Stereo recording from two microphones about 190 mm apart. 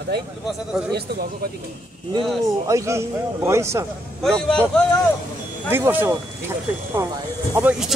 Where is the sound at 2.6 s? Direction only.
15° right (ahead or behind).